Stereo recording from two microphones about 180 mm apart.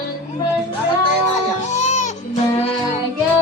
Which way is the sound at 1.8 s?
40° left (ahead or behind).